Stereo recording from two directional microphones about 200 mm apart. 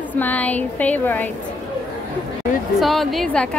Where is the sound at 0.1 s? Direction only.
10° left (ahead or behind).